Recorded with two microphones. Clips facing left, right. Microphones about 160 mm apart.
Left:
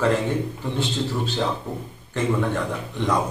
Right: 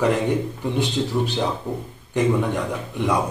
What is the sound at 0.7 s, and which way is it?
Speech, 15° right (ahead or behind).